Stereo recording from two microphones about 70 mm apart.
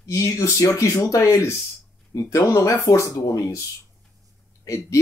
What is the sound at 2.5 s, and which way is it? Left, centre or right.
Speech, left.